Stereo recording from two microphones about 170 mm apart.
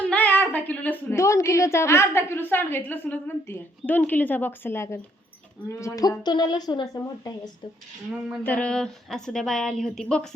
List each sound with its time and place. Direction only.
0.0 s a woman's voice: 10° left (ahead or behind)
8.4 s a woman's voice: 5° left (ahead or behind)